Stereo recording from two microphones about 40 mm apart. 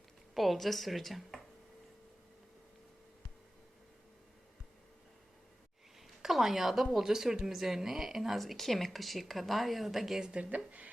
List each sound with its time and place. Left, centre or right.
0.3 s speech: centre
6.2 s speech: centre
8.4 s speech: centre
10.3 s speech: right